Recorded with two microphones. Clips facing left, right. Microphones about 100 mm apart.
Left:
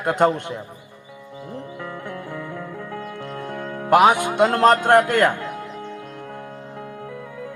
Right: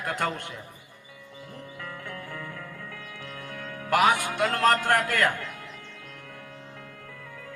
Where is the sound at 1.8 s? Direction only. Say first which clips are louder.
Left 7 dB; 20° left (ahead or behind).